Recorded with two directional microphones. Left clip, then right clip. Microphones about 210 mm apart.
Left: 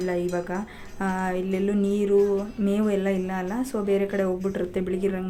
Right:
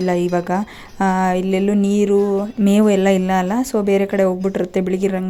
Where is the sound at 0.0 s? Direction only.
35° right (ahead or behind).